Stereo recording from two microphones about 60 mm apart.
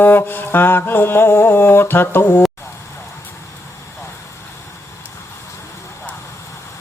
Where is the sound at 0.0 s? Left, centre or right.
Left.